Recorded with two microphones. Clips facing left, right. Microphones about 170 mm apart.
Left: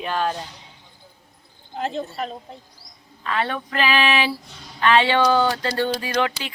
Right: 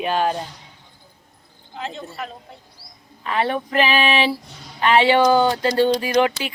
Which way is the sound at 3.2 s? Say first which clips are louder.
Right 3 dB; 20° right (ahead or behind).